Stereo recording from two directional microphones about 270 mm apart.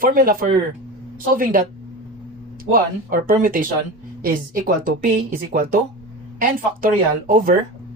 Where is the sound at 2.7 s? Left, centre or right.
Right.